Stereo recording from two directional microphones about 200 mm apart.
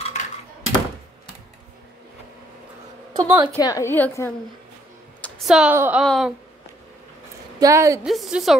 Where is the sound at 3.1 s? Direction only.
20° right (ahead or behind).